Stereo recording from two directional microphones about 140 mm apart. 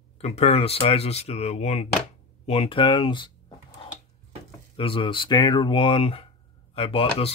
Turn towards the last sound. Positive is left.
turn(degrees=40)  # may be behind; listen again after turning